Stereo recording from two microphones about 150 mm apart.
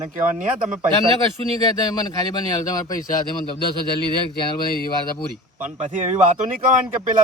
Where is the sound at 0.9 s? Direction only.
35° right (ahead or behind).